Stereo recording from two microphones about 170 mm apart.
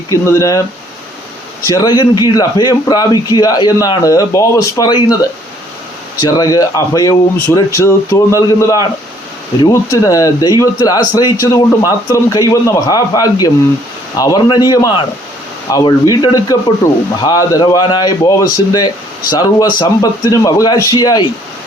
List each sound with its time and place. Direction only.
0.1 s speech: 15° left (ahead or behind)
1.6 s speech: 20° left (ahead or behind)
6.2 s speech: 20° left (ahead or behind)